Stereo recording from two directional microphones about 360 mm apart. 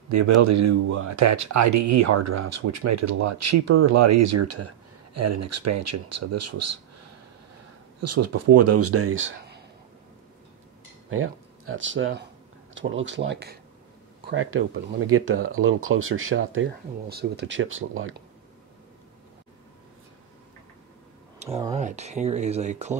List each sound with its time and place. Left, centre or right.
0.1 s speech: right
8.0 s speech: right
11.1 s speech: right
21.4 s speech: centre